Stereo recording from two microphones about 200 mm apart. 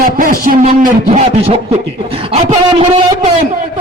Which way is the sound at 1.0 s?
30° right (ahead or behind).